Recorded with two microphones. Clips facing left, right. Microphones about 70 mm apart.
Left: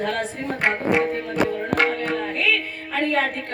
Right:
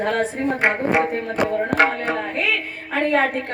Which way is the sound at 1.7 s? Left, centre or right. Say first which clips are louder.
Right 1 dB; centre.